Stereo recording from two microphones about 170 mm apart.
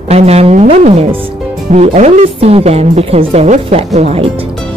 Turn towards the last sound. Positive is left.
turn(degrees=-40)  # may be behind; listen again after turning